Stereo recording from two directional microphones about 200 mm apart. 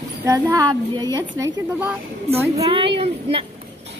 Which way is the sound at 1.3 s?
10° right (ahead or behind).